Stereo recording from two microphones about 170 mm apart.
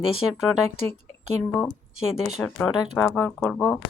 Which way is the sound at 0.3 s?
Centre (ahead or behind).